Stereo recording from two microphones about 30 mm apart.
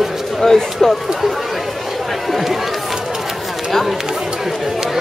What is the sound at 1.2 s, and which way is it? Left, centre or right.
Speech, centre.